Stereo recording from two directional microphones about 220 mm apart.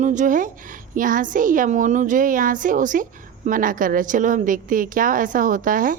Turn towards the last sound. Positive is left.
turn(degrees=-40)  # may be behind; listen again after turning